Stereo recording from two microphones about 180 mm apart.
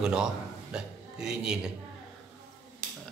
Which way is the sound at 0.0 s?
5° right (ahead or behind).